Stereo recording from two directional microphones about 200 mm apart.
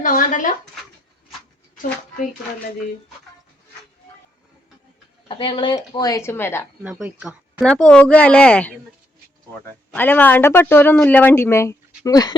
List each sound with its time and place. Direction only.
0.0 s speech: 40° left (ahead or behind)
5.3 s speech: 25° left (ahead or behind)
6.8 s speech: 5° right (ahead or behind)
9.9 s speech: 10° left (ahead or behind)